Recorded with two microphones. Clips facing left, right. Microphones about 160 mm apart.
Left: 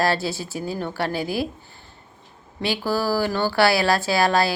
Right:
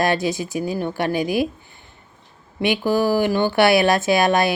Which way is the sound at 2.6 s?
20° right (ahead or behind).